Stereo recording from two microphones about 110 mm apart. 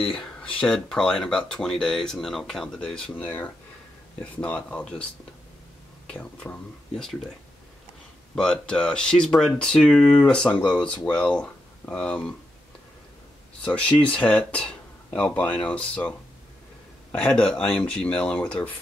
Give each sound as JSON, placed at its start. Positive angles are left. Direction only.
{"t": 0.1, "sound": "speech", "side_deg": 10}
{"t": 6.0, "sound": "speech", "side_deg": 10}
{"t": 8.4, "sound": "speech", "side_deg": 5}
{"t": 13.6, "sound": "speech", "side_deg": 10}